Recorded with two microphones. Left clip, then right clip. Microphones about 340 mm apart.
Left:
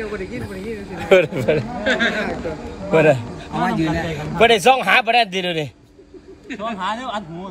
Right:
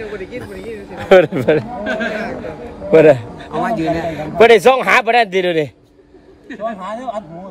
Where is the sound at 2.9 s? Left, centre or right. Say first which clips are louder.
Right 6 dB; right.